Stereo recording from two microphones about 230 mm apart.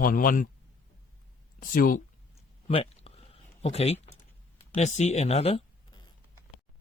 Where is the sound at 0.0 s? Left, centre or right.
Left.